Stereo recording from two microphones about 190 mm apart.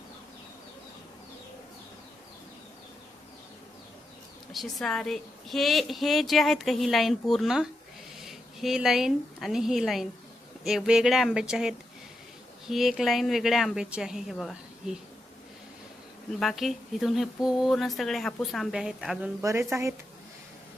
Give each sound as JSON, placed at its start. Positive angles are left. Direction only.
{"t": 4.5, "sound": "a woman's voice", "side_deg": 0}
{"t": 16.4, "sound": "a woman's voice", "side_deg": 0}
{"t": 19.4, "sound": "speech", "side_deg": -15}